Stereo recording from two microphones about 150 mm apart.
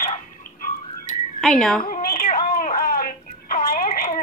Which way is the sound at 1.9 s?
75° left (ahead or behind).